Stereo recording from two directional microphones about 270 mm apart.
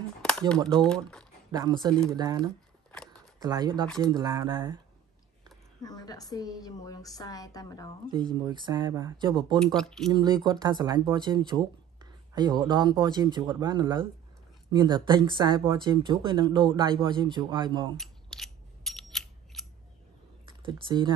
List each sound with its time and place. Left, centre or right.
0.2 s a sound: centre
0.7 s speech: centre
1.5 s speech: centre
3.1 s camera: centre
4.0 s speech: centre
5.8 s a woman's voice: centre
8.1 s speech: centre
9.8 s speech: centre
10.1 s speech: centre
17.9 s scissors: centre
20.6 s speech: centre